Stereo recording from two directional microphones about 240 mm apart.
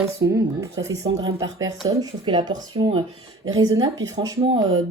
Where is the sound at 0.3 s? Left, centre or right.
Centre.